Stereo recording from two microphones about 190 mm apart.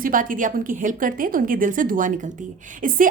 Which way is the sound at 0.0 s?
45° right (ahead or behind).